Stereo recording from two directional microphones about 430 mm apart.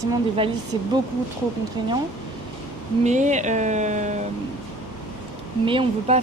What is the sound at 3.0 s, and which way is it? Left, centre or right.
Speech, centre.